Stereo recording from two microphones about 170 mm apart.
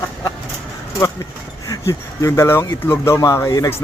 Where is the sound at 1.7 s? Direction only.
20° left (ahead or behind).